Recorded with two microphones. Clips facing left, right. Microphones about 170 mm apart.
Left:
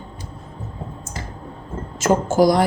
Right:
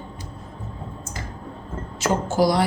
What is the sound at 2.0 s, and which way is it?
Speech, 45° left (ahead or behind).